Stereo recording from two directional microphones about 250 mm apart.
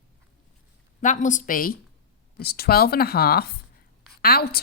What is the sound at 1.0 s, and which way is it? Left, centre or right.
Speech, left.